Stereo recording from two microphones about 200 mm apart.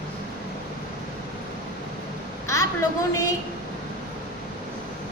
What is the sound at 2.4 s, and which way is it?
Speech, 15° left (ahead or behind).